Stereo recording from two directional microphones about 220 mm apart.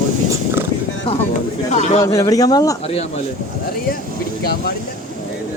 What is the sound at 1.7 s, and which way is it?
Speech, 30° left (ahead or behind).